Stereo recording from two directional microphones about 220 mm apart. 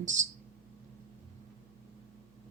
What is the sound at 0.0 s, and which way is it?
Speech, 35° right (ahead or behind).